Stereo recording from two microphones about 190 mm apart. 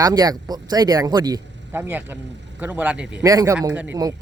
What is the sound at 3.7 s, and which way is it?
Speech, 5° right (ahead or behind).